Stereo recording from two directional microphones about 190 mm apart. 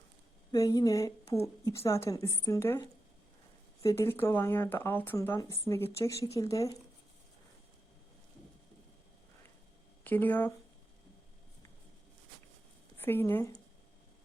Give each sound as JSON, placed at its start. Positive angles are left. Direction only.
{"t": 0.5, "sound": "speech", "side_deg": 20}
{"t": 3.8, "sound": "speech", "side_deg": 15}
{"t": 10.0, "sound": "speech", "side_deg": 10}
{"t": 13.0, "sound": "speech", "side_deg": 10}